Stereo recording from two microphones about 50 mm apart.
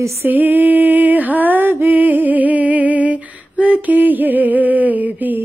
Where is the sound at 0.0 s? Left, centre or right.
Right.